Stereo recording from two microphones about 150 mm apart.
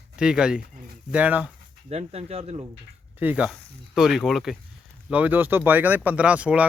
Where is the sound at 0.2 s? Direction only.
5° right (ahead or behind).